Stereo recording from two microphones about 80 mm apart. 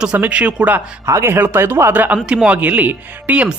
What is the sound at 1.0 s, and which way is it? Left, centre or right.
Speech, right.